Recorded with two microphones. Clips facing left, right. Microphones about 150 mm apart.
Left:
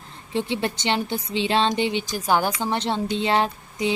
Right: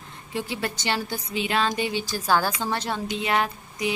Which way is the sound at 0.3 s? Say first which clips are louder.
Left 4 dB; 25° left (ahead or behind).